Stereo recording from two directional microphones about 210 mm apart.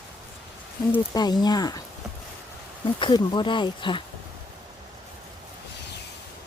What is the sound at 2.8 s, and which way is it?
Speech, 25° left (ahead or behind).